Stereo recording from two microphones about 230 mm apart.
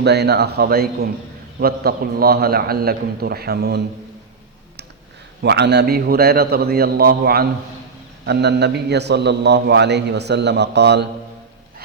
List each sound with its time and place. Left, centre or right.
0.0 s a man's voice: right
5.4 s a man's voice: right